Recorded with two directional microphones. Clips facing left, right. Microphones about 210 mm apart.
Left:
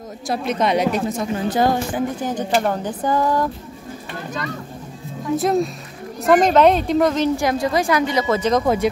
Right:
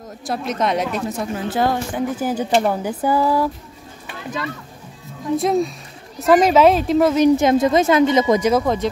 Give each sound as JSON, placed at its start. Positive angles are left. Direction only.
{"t": 0.3, "sound": "speech", "side_deg": 0}
{"t": 5.3, "sound": "speech", "side_deg": 0}
{"t": 7.3, "sound": "a woman's voice", "side_deg": -20}
{"t": 8.4, "sound": "speech", "side_deg": -10}